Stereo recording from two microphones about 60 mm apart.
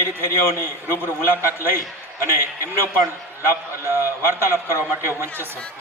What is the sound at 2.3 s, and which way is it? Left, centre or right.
A man's voice, right.